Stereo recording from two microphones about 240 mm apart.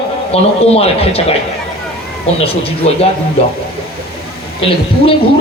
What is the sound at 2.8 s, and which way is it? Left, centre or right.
Speech, left.